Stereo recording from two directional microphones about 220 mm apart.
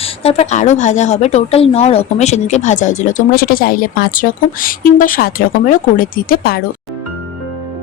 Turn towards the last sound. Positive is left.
turn(degrees=45)  # may be behind; listen again after turning